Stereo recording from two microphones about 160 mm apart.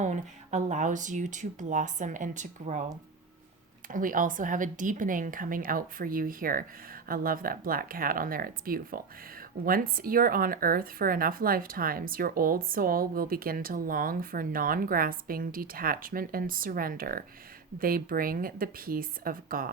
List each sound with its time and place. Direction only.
0.0 s speech: 50° right (ahead or behind)
3.8 s speech: 60° right (ahead or behind)